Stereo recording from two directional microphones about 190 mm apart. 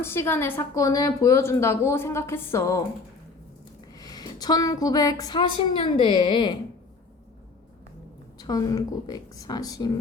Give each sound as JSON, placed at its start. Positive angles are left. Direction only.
{"t": 0.0, "sound": "a woman's voice", "side_deg": 10}
{"t": 3.9, "sound": "a woman's voice", "side_deg": 20}
{"t": 8.4, "sound": "a woman's voice", "side_deg": 20}